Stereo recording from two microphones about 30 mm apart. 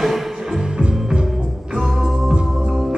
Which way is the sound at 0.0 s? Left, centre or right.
Centre.